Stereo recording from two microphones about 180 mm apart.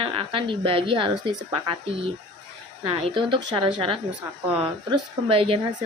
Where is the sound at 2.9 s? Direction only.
30° right (ahead or behind).